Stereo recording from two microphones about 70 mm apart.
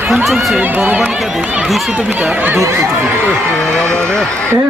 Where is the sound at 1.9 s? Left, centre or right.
Centre.